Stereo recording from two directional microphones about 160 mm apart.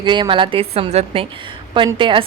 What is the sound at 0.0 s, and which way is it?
A woman's voice, 30° right (ahead or behind).